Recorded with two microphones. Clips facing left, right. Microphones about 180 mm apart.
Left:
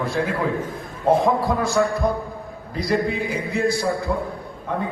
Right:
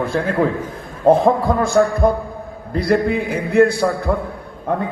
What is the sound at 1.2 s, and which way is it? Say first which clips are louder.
A man's voice: right 4 dB; 55° right (ahead or behind).